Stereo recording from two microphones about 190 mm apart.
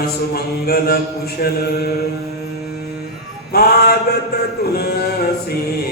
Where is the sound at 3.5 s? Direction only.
55° left (ahead or behind).